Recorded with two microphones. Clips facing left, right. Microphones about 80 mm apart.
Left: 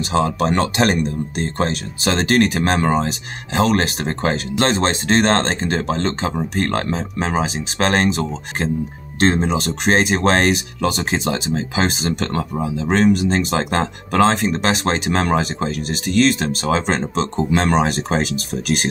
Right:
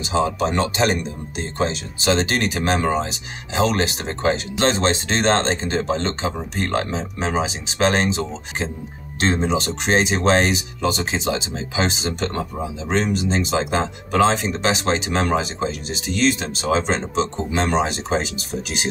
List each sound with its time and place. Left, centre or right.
0.0 s speech: left